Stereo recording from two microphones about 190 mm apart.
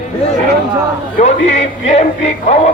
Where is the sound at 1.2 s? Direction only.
35° left (ahead or behind).